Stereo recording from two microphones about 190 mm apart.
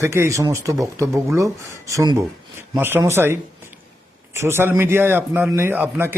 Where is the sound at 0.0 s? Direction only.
15° right (ahead or behind).